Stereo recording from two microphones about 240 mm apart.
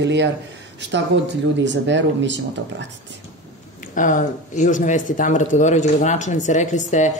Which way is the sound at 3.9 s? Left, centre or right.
Left.